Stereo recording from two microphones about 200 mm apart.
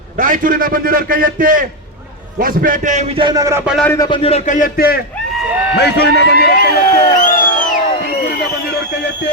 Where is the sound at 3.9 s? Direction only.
20° left (ahead or behind); by 7.0 s 50° left (ahead or behind).